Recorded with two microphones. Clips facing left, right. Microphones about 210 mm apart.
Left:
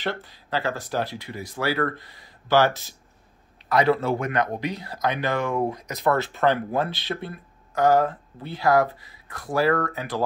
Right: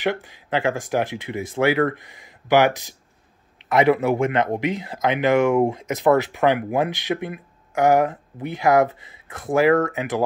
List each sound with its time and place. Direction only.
0.0 s speech: 15° right (ahead or behind)